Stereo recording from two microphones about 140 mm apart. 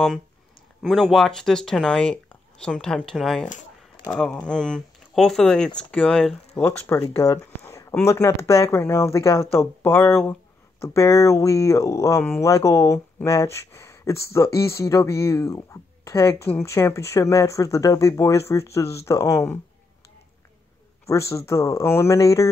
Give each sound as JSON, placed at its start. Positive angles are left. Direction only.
{"t": 0.8, "sound": "speech", "side_deg": 0}
{"t": 6.5, "sound": "speech", "side_deg": 20}
{"t": 7.2, "sound": "a sound", "side_deg": 20}
{"t": 8.0, "sound": "speech", "side_deg": 20}
{"t": 21.1, "sound": "speech", "side_deg": 20}